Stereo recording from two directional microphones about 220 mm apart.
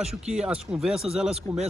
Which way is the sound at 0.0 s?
5° right (ahead or behind).